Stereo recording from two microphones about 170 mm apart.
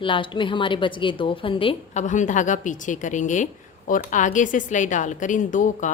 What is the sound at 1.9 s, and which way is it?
A woman's voice, 45° left (ahead or behind).